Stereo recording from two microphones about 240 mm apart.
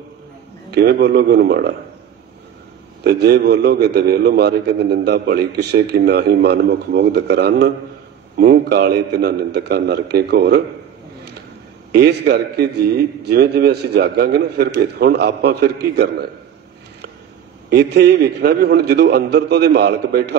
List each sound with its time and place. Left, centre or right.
0.7 s speech: right
3.0 s a man's voice: right
11.9 s a man's voice: right
17.6 s a man's voice: right